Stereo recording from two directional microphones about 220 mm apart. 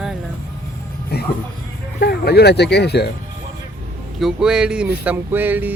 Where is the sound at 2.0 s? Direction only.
45° left (ahead or behind).